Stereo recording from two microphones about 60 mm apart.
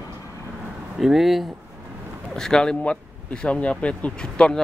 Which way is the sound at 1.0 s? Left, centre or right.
Centre.